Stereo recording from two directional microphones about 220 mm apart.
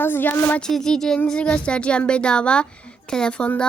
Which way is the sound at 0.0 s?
10° left (ahead or behind).